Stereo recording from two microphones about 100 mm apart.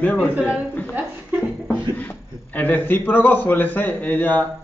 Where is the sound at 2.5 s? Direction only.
20° left (ahead or behind).